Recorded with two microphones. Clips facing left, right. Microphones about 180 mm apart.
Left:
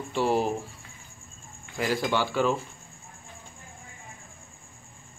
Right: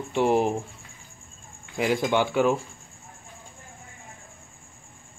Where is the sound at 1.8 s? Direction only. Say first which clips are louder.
Right 3 dB; 20° right (ahead or behind).